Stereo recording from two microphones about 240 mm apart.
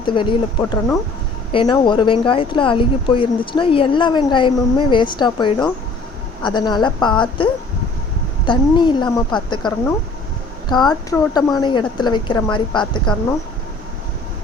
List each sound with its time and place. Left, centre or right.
0.0 s speech: centre